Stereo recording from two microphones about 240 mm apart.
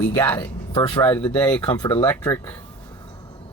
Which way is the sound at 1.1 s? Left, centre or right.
Centre.